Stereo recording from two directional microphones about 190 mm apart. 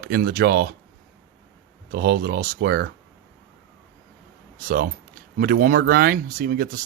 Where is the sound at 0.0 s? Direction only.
55° right (ahead or behind).